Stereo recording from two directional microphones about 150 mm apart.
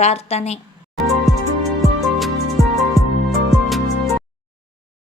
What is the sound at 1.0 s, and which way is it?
Music, centre (ahead or behind).